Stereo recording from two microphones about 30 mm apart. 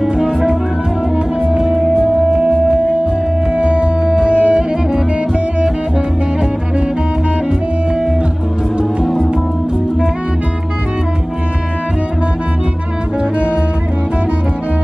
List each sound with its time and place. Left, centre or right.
0.0 s music: centre
2.3 s music: right
3.5 s music: right